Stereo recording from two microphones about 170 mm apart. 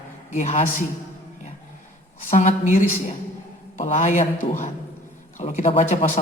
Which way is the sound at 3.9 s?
45° left (ahead or behind).